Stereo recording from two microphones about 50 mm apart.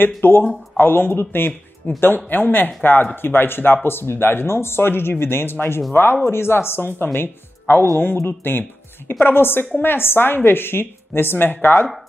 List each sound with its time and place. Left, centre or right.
0.0 s a woman's voice: left